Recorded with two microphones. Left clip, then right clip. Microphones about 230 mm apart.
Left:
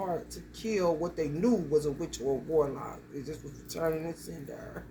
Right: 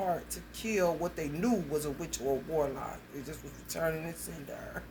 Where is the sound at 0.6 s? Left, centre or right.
Centre.